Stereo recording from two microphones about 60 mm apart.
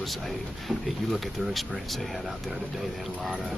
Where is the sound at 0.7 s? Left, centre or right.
Centre.